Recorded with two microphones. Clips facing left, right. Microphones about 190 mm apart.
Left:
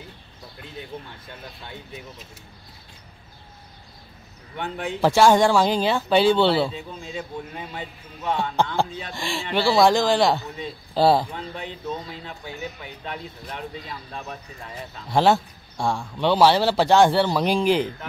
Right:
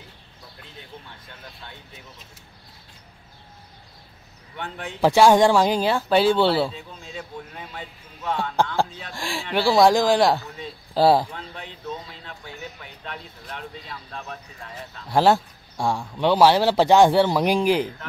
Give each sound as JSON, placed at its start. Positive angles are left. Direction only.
{"t": 0.9, "sound": "speech", "side_deg": 45}
{"t": 4.6, "sound": "speech", "side_deg": 0}
{"t": 5.0, "sound": "speech", "side_deg": -10}
{"t": 11.3, "sound": "speech", "side_deg": 0}
{"t": 15.0, "sound": "speech", "side_deg": -5}